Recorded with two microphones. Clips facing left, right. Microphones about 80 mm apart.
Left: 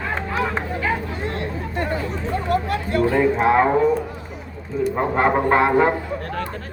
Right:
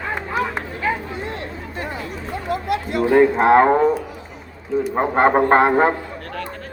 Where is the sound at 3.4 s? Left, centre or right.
Right.